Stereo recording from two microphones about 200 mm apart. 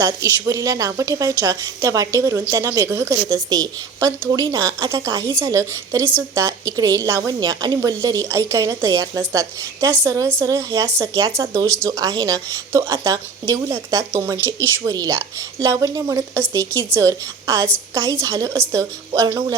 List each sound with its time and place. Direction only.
0.0 s a woman's voice: 15° right (ahead or behind)
14.3 s speech: 10° left (ahead or behind)
14.8 s a woman's voice: 20° right (ahead or behind)